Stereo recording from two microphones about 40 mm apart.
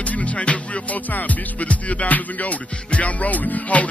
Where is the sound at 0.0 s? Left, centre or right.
Left.